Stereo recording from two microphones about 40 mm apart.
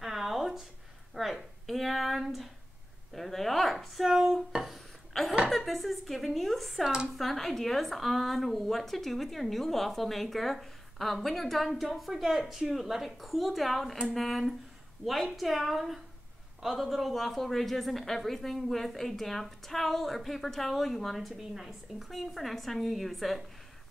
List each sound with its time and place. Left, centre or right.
0.0 s a sound: centre
3.2 s a woman's voice: centre
5.1 s a woman's voice: centre
6.8 s speech: centre
7.2 s a woman's voice: centre